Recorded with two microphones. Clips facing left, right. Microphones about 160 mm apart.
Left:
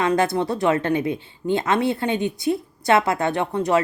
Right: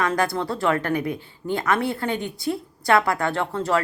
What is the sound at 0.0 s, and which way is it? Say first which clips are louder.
Speech: left 3 dB; 20° left (ahead or behind).